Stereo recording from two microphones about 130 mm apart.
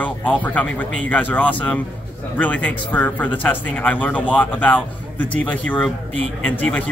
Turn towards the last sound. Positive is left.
turn(degrees=10)  # may be behind; listen again after turning